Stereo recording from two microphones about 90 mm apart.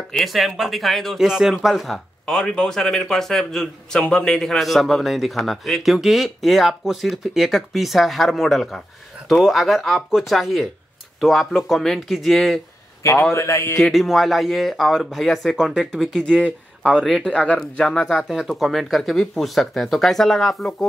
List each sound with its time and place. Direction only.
0.1 s speech: centre (ahead or behind)
13.3 s a sound: 30° left (ahead or behind)
13.7 s speech: centre (ahead or behind)
16.4 s speech: 15° right (ahead or behind)
17.1 s speech: 5° left (ahead or behind)